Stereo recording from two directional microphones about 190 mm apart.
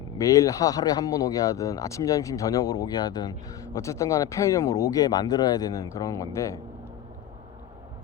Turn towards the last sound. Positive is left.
turn(degrees=15)  # may be behind; listen again after turning